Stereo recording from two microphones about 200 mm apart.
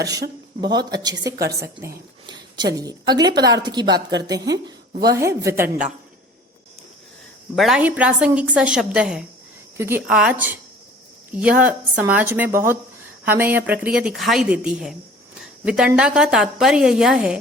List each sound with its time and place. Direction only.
0.7 s a woman's voice: 20° right (ahead or behind)
1.1 s a woman's voice: 55° right (ahead or behind)
1.5 s a woman's voice: 15° right (ahead or behind)
2.2 s a sound: 20° right (ahead or behind)
3.2 s a woman's voice: 20° right (ahead or behind)
4.4 s speech: 55° right (ahead or behind)
5.2 s a woman's voice: 15° right (ahead or behind)
7.5 s a woman's voice: centre (ahead or behind)
15.4 s a sound: 5° right (ahead or behind)
15.9 s a woman's voice: 5° right (ahead or behind)